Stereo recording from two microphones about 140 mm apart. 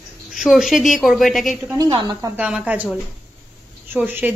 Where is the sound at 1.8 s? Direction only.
30° right (ahead or behind).